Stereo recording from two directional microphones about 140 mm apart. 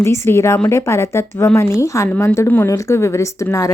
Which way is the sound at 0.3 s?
20° left (ahead or behind).